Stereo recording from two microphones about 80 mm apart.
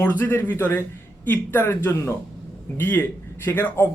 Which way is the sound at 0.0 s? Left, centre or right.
Left.